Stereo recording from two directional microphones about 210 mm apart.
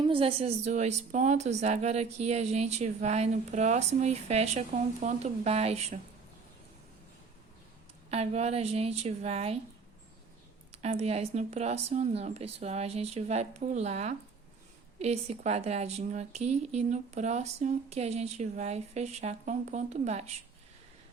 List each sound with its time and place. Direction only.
0.0 s speech: 25° right (ahead or behind)
8.1 s a woman's voice: 30° right (ahead or behind)
10.7 s speech: 30° right (ahead or behind)